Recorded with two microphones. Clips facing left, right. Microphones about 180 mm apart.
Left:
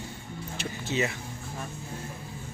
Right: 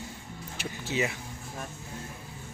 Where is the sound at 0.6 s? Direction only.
10° right (ahead or behind).